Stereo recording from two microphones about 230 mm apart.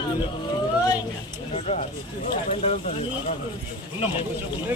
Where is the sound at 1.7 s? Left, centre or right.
Left.